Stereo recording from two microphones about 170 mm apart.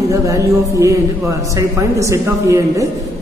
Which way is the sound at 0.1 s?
20° right (ahead or behind).